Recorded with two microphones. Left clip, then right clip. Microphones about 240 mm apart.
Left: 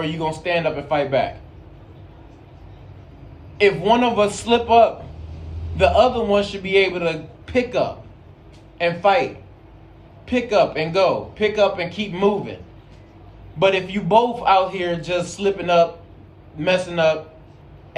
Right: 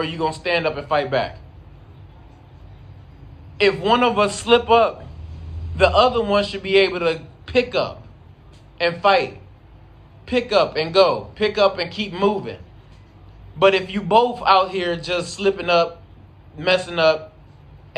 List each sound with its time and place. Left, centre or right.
0.0 s a man's voice: centre
3.6 s a man's voice: centre
13.6 s a man's voice: centre